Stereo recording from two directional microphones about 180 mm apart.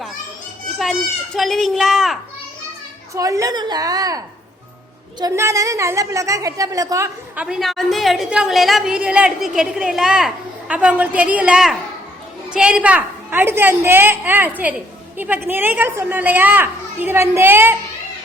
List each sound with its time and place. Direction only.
1.4 s a woman's voice: centre (ahead or behind)
3.2 s a woman's voice: 20° right (ahead or behind)
5.2 s a child's voice: 15° right (ahead or behind)
7.3 s a woman's voice: 5° right (ahead or behind)